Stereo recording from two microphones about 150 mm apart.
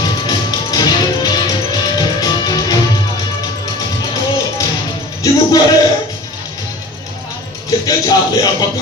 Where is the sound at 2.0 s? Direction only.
25° left (ahead or behind).